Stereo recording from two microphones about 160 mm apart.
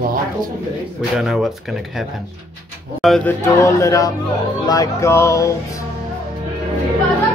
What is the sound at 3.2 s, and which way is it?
Speech, 15° left (ahead or behind).